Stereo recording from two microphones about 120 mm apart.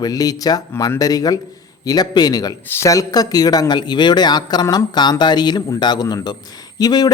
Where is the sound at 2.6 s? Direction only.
25° left (ahead or behind).